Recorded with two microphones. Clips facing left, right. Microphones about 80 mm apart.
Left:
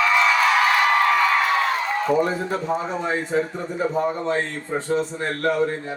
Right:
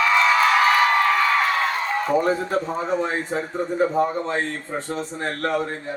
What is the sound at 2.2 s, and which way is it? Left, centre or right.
A man's voice, right.